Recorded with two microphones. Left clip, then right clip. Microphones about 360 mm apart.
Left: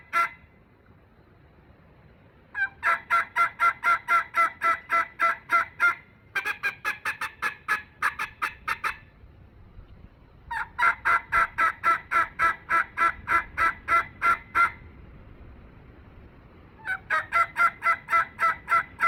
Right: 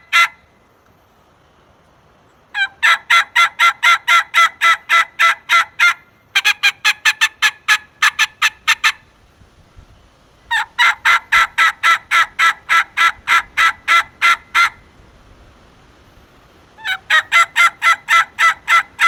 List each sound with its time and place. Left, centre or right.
2.5 s fowl: centre
10.6 s turkey: centre
16.9 s fowl: centre